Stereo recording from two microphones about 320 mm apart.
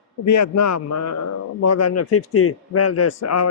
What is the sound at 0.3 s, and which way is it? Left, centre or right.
A man's voice, left.